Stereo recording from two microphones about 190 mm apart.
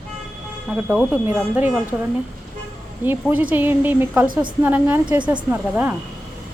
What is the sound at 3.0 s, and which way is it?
Speech, 10° right (ahead or behind).